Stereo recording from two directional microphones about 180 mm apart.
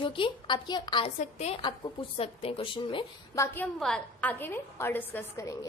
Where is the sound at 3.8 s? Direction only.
5° left (ahead or behind).